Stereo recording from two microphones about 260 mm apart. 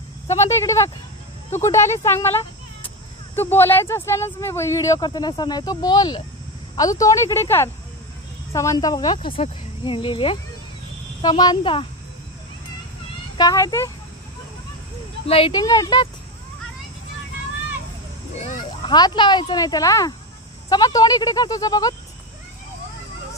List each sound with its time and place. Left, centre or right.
0.5 s speech: centre
3.3 s speech: centre
13.4 s speech: centre
15.2 s speech: left
18.4 s speech: left